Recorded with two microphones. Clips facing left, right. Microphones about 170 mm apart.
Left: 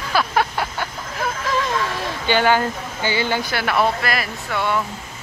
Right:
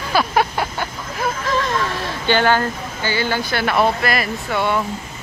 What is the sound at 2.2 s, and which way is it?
Speech, 10° left (ahead or behind).